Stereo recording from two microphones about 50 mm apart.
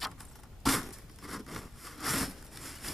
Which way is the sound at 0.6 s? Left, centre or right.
Centre.